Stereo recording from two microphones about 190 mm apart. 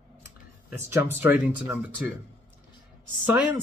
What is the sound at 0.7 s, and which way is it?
Speech, 10° right (ahead or behind).